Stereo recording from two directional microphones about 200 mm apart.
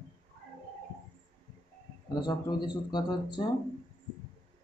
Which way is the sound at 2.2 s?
20° left (ahead or behind).